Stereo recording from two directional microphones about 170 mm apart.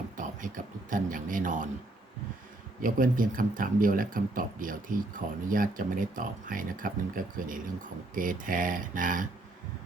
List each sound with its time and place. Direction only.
0.2 s speech: 50° right (ahead or behind)
2.8 s speech: 55° right (ahead or behind)